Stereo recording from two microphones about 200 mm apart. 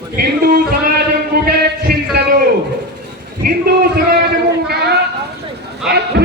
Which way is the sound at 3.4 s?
50° right (ahead or behind).